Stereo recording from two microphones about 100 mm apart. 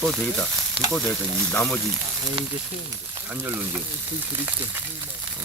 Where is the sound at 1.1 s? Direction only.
20° left (ahead or behind).